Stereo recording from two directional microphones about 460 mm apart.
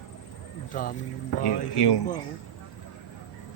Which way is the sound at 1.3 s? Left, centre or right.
Left.